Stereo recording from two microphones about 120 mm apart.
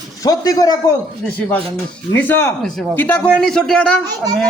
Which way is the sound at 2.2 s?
15° left (ahead or behind).